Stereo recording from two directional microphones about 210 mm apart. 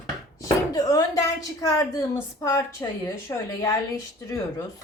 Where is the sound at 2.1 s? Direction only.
15° left (ahead or behind).